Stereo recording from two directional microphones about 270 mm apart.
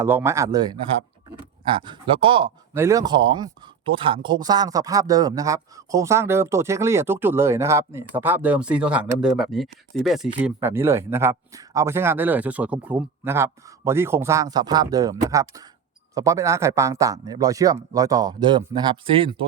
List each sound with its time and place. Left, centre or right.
0.0 s speech: centre